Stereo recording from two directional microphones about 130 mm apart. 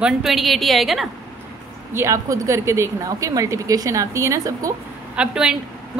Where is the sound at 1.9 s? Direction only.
25° right (ahead or behind).